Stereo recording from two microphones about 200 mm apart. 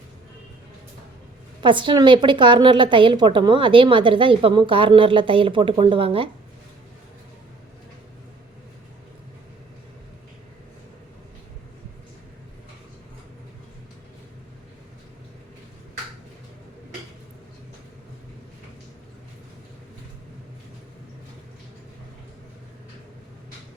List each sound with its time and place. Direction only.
1.6 s a woman's voice: 25° right (ahead or behind)